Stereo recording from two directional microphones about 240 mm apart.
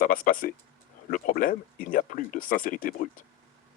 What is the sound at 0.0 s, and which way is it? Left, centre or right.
Speech, left.